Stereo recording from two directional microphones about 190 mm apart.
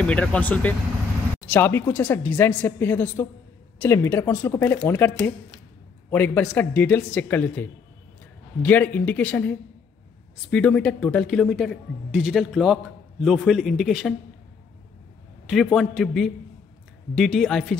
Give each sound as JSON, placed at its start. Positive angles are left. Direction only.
{"t": 0.0, "sound": "a woman's voice", "side_deg": 5}
{"t": 8.6, "sound": "a woman's voice", "side_deg": 10}
{"t": 15.4, "sound": "a man's voice", "side_deg": 0}